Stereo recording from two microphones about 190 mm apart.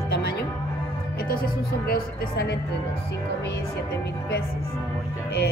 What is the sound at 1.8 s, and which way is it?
Speech, 55° left (ahead or behind).